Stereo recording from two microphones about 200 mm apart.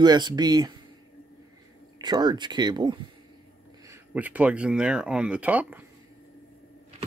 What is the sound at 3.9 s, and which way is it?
Speech, 10° right (ahead or behind).